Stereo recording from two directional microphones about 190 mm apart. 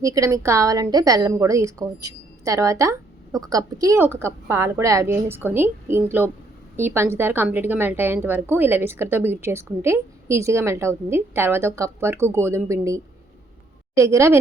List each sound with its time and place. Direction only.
0.0 s a woman's voice: 15° right (ahead or behind)